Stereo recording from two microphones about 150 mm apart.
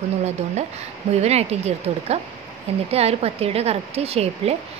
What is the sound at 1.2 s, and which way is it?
A woman's voice, 45° right (ahead or behind).